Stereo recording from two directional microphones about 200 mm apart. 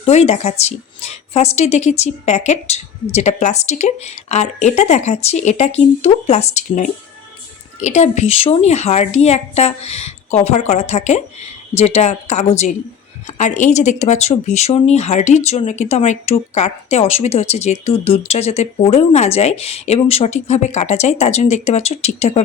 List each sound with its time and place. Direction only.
0.0 s speech: 30° left (ahead or behind)